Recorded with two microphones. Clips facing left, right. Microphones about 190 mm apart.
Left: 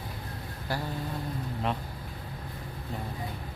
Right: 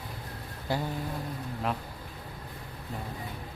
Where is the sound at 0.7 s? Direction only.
20° right (ahead or behind).